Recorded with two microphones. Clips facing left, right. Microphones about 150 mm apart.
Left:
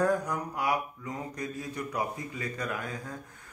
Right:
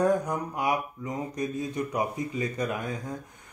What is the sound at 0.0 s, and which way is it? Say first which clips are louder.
Speech: right 3 dB; 20° right (ahead or behind).